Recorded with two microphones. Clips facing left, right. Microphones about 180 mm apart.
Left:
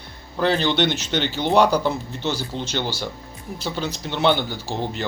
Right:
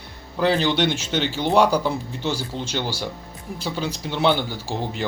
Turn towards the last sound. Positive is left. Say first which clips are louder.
# even
turn(degrees=-5)  # may be behind; listen again after turning